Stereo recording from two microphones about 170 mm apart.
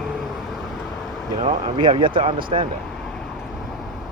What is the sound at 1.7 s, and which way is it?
Speech, 30° right (ahead or behind).